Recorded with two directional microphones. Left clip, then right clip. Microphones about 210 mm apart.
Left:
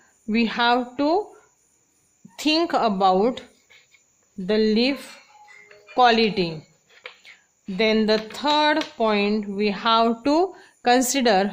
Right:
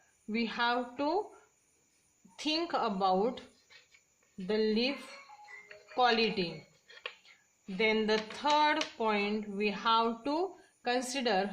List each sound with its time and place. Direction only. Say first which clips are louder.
0.3 s speech: left 11 dB; 35° left (ahead or behind)
2.3 s speech: left 12 dB; 35° left (ahead or behind)
7.2 s a sound: left 13 dB; 35° left (ahead or behind)
7.8 s speech: left 9 dB; 35° left (ahead or behind)